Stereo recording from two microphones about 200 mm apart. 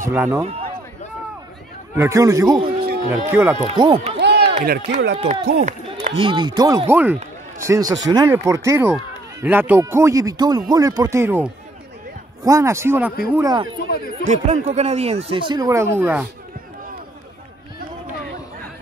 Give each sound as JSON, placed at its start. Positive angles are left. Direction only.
{"t": 0.1, "sound": "speech", "side_deg": -10}
{"t": 2.0, "sound": "speech", "side_deg": -15}
{"t": 3.6, "sound": "speech", "side_deg": -25}
{"t": 4.2, "sound": "run", "side_deg": -55}
{"t": 4.6, "sound": "speech", "side_deg": -45}
{"t": 5.1, "sound": "speech", "side_deg": -35}
{"t": 6.2, "sound": "speech", "side_deg": -20}
{"t": 14.2, "sound": "speech", "side_deg": -35}